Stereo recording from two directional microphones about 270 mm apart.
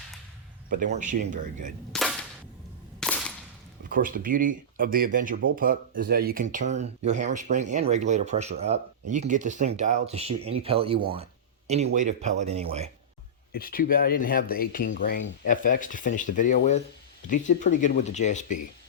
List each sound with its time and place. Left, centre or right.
0.7 s speech: right
1.9 s cap gun: centre
3.8 s speech: right
13.5 s speech: left